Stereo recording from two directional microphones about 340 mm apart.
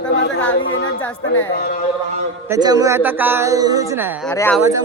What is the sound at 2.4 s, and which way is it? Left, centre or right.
Speech, centre.